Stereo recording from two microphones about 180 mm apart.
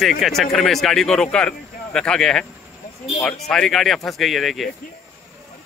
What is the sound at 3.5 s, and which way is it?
Speech, centre (ahead or behind).